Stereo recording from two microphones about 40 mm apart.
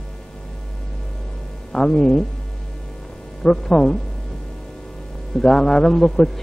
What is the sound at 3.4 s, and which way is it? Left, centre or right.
Speech, centre.